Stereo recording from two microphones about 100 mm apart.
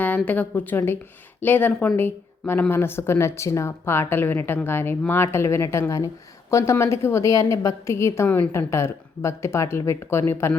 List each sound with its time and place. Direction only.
0.3 s a woman's voice: 15° left (ahead or behind)